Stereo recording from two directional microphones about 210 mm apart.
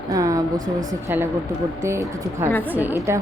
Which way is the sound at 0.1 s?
15° right (ahead or behind).